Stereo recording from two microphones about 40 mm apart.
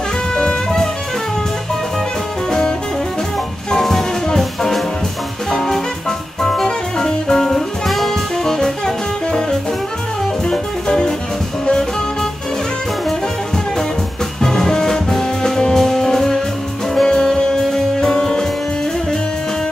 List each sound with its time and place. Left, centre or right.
0.3 s music: centre
3.7 s music: centre
14.4 s music: centre